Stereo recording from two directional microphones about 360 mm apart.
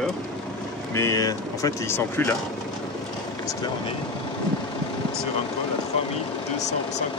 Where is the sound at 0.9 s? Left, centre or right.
Centre.